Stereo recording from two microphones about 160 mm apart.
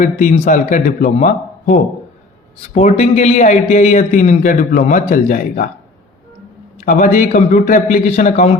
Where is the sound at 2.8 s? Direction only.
45° left (ahead or behind).